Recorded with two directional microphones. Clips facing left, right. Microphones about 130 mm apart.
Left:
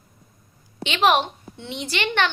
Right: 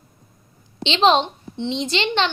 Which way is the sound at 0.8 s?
25° right (ahead or behind).